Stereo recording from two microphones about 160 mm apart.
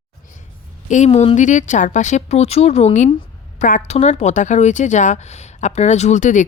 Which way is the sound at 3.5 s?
50° left (ahead or behind).